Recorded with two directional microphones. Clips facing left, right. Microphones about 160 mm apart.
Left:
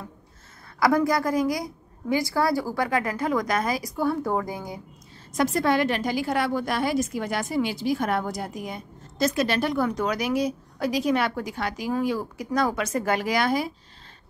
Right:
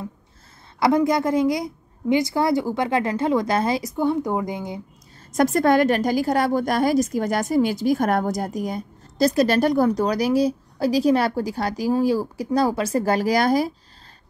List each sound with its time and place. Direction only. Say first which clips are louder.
0.7 s a woman's voice: right 3 dB; 25° right (ahead or behind)
5.3 s a woman's voice: right 5 dB; 45° right (ahead or behind)